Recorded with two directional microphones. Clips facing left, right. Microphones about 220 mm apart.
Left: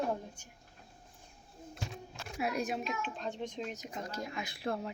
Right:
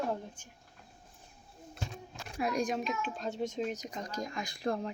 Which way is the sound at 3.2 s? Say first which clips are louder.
Right 4 dB; 40° right (ahead or behind).